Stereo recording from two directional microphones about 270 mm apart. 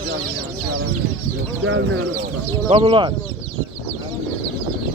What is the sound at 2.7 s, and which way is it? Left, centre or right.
Speech, right.